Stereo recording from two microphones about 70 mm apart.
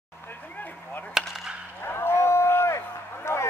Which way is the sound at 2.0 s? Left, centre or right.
Left.